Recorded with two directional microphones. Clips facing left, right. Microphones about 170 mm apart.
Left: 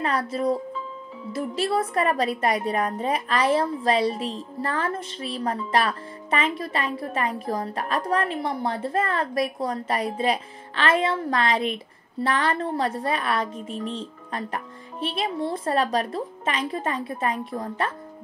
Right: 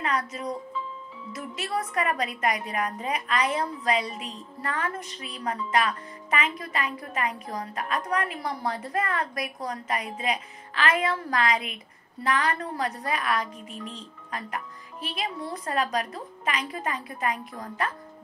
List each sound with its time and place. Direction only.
0.0 s a woman's voice: 30° left (ahead or behind)